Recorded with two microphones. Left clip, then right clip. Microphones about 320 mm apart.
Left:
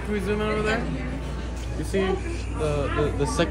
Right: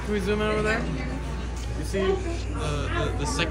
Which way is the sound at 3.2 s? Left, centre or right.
Centre.